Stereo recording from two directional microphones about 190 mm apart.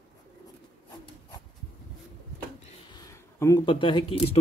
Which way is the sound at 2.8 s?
20° left (ahead or behind).